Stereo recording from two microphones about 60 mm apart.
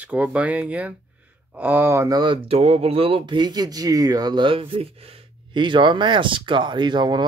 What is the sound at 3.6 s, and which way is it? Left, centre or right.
Speech, right.